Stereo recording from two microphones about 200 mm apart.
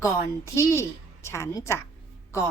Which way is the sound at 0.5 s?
15° left (ahead or behind).